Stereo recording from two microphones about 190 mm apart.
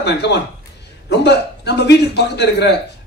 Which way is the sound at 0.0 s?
65° left (ahead or behind).